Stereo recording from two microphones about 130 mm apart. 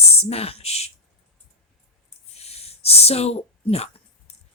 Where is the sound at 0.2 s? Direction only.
50° left (ahead or behind).